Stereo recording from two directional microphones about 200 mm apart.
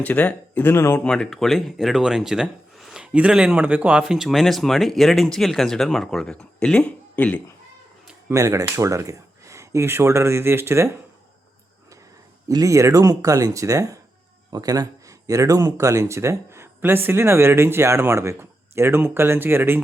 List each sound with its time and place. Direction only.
0.0 s speech: 5° left (ahead or behind)
8.3 s speech: 15° right (ahead or behind)
12.5 s speech: 15° right (ahead or behind)